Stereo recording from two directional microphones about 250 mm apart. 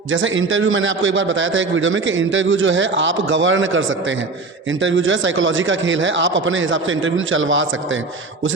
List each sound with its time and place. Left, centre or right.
0.1 s a man's voice: right